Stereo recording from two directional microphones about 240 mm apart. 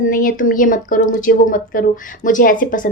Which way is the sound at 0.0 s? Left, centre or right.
Left.